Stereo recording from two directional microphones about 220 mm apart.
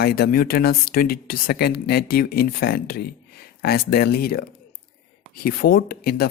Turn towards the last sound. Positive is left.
turn(degrees=45)  # may be behind; listen again after turning